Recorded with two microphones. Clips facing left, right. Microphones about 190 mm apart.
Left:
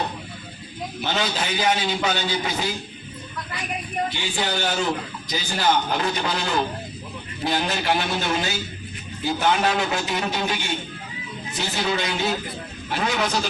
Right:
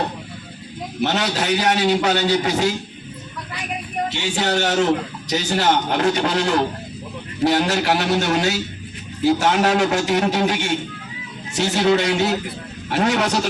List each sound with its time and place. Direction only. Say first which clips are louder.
1.0 s a man's voice: right 5 dB; 70° right (ahead or behind)
4.1 s a man's voice: right 5 dB; 75° right (ahead or behind)